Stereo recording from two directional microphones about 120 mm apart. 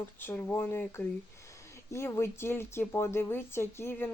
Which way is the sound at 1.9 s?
20° left (ahead or behind).